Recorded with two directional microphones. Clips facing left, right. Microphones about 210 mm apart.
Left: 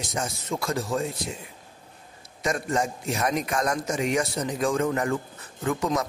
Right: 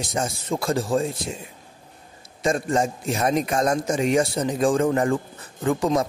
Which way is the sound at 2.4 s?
30° right (ahead or behind).